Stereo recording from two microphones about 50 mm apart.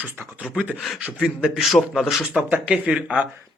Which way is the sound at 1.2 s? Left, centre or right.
Centre.